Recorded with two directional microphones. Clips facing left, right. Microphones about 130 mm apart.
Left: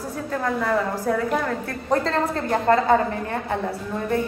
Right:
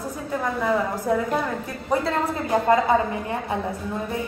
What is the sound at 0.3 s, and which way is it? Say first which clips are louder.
A woman's voice: even; 15° right (ahead or behind).